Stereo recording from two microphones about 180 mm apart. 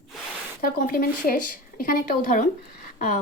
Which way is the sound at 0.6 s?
50° left (ahead or behind).